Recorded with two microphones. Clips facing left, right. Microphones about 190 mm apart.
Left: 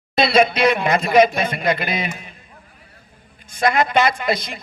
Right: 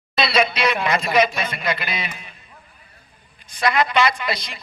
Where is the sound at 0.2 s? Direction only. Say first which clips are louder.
Left 5 dB; 50° left (ahead or behind).